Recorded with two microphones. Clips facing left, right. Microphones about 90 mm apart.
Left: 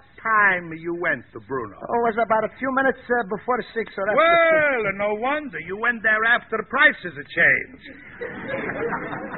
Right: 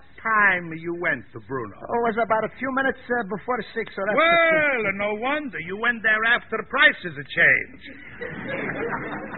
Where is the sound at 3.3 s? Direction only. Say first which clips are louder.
Left 3 dB; 5° left (ahead or behind).